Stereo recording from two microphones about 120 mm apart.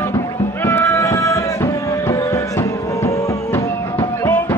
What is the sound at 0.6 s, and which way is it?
Music, 20° left (ahead or behind).